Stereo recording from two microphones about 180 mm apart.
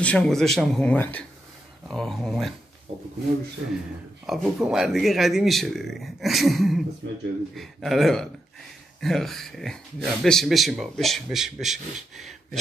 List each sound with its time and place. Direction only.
0.0 s a man's voice: 5° left (ahead or behind)
2.9 s speech: 30° right (ahead or behind)
3.6 s speech: 90° right
4.3 s a man's voice: centre (ahead or behind)